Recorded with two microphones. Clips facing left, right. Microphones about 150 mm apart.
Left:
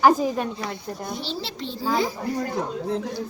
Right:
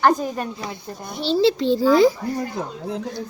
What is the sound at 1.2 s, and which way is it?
Speech, 90° right.